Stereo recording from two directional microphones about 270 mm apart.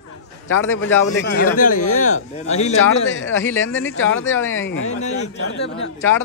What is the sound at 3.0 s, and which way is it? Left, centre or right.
Speech, left.